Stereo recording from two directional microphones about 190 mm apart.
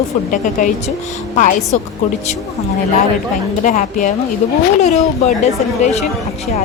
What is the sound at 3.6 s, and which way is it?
A woman's voice, 40° left (ahead or behind).